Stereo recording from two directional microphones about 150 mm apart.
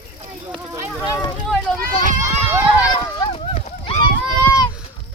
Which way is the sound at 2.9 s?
30° left (ahead or behind).